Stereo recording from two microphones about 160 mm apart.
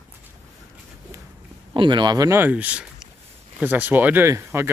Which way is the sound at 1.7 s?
30° right (ahead or behind).